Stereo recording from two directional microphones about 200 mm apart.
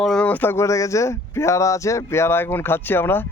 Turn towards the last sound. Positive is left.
turn(degrees=10)  # may be behind; listen again after turning